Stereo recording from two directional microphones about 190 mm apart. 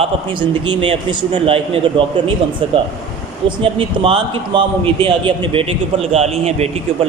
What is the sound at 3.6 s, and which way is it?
A man's voice, 25° right (ahead or behind).